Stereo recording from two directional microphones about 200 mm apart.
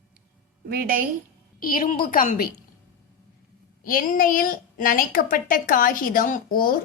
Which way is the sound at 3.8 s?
45° left (ahead or behind).